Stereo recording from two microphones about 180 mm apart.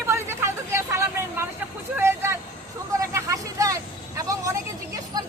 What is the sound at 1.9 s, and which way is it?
Vehicle, 15° right (ahead or behind).